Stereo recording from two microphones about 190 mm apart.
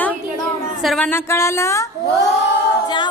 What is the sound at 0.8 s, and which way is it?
A woman's voice, centre (ahead or behind).